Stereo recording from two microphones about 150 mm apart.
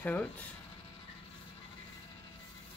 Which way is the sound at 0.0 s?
10° left (ahead or behind).